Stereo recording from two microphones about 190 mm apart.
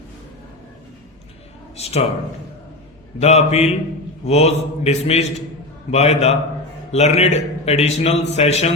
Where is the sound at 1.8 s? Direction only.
35° left (ahead or behind).